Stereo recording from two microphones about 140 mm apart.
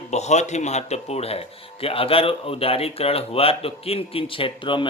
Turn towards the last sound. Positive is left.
turn(degrees=40)  # may be behind; listen again after turning